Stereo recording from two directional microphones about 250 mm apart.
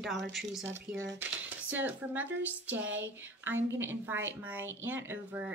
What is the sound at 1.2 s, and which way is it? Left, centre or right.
Speech, centre.